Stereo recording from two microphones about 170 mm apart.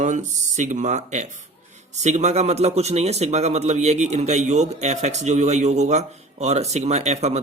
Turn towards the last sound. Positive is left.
turn(degrees=-40)  # may be behind; listen again after turning